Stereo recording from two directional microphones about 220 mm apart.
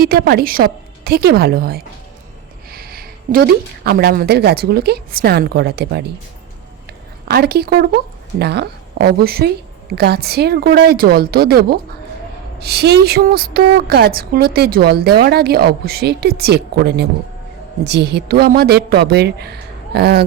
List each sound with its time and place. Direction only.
0.0 s a woman's voice: 45° right (ahead or behind)
7.3 s a woman's voice: 45° right (ahead or behind)